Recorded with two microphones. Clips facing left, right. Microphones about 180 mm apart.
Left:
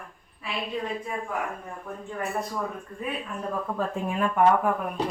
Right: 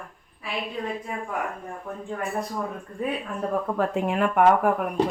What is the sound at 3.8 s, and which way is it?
Speech, 70° right (ahead or behind).